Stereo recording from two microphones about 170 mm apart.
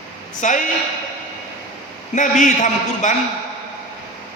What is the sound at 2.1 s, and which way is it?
A man's voice, 45° left (ahead or behind).